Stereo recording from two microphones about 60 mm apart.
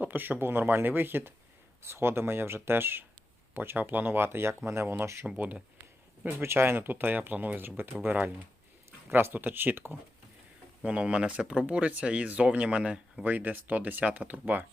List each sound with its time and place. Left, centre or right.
0.0 s speech: right
5.4 s speech: right
6.2 s speech: right
10.8 s speech: centre
13.2 s speech: right